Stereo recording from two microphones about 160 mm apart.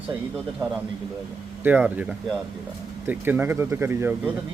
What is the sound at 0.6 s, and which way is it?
Speech, 20° right (ahead or behind).